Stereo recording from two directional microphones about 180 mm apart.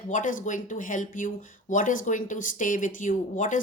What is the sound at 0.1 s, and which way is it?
Speech, 45° left (ahead or behind).